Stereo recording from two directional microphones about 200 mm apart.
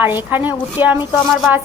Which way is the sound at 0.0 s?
10° right (ahead or behind).